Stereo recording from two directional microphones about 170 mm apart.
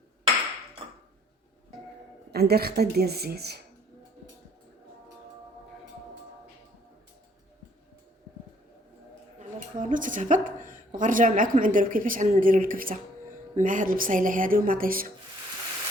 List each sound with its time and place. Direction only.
2.3 s a woman's voice: 65° right (ahead or behind)
9.4 s a woman's voice: 50° right (ahead or behind)